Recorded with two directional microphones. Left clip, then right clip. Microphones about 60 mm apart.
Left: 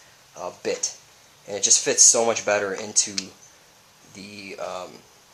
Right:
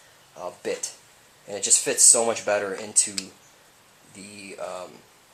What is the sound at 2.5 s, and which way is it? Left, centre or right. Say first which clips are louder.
Speech: left 2 dB; left.